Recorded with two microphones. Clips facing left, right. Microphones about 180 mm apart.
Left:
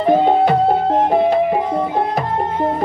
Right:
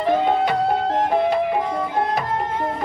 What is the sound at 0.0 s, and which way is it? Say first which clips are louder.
Music: left 5 dB; 35° left (ahead or behind).